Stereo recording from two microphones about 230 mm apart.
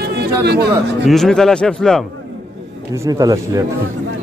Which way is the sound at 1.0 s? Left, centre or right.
Centre.